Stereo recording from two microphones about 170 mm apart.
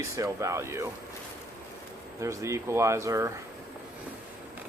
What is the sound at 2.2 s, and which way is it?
Speech, 15° right (ahead or behind).